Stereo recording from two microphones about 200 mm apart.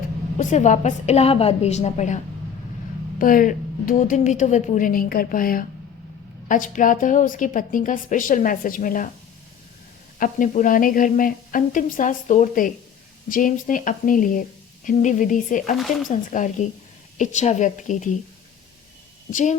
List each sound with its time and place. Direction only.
0.3 s a woman's voice: 35° left (ahead or behind)
10.2 s a woman's voice: 40° left (ahead or behind)
19.3 s a woman's voice: 40° left (ahead or behind)